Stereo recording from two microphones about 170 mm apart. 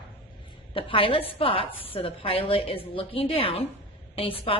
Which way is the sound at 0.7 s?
30° left (ahead or behind).